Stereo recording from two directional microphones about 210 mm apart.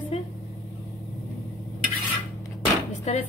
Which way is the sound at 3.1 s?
30° left (ahead or behind).